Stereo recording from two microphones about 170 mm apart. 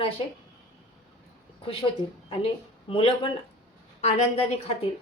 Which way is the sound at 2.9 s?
30° left (ahead or behind).